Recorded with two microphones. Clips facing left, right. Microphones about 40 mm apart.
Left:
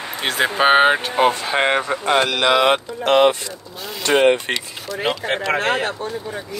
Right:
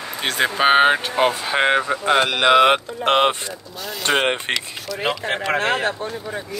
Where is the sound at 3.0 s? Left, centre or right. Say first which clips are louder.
Left 3 dB; right.